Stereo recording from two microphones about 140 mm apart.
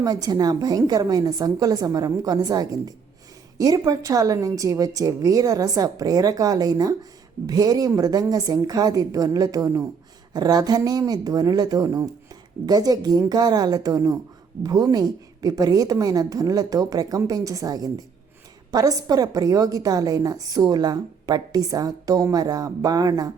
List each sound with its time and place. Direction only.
0.0 s a woman's voice: 30° right (ahead or behind)